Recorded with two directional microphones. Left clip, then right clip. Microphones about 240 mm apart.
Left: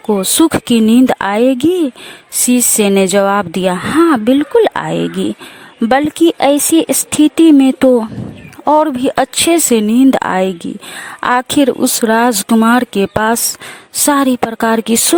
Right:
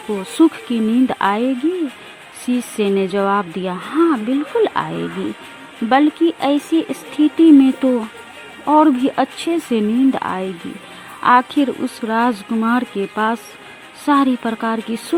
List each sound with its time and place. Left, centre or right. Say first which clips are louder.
0.2 s speech: even; left